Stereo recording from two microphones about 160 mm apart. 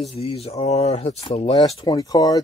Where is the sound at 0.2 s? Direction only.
40° left (ahead or behind).